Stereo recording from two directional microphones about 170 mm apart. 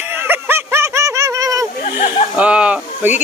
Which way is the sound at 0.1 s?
10° right (ahead or behind).